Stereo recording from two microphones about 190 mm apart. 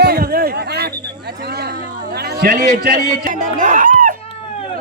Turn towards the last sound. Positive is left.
turn(degrees=-45)  # may be behind; listen again after turning